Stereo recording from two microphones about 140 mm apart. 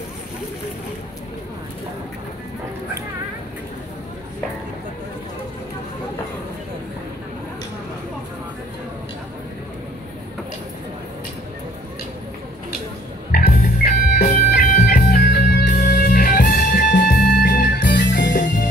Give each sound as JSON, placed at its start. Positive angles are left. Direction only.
{"t": 13.3, "sound": "music", "side_deg": 90}